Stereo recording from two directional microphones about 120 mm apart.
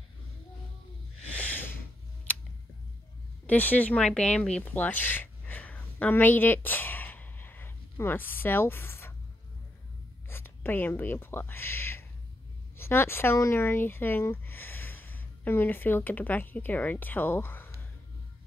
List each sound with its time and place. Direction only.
1.2 s a sound: 10° left (ahead or behind)
2.3 s scissors: 10° left (ahead or behind)
3.4 s speech: 15° left (ahead or behind)
10.3 s speech: 20° left (ahead or behind)